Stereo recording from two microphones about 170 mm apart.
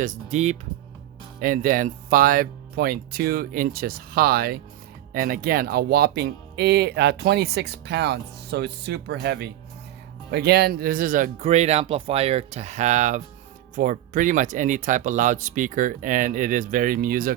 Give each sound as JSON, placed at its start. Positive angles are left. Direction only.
{"t": 0.0, "sound": "speech", "side_deg": -45}
{"t": 1.4, "sound": "speech", "side_deg": -55}
{"t": 10.3, "sound": "speech", "side_deg": -70}